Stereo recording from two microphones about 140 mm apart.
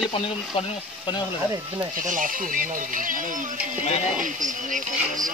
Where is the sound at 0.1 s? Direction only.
40° left (ahead or behind).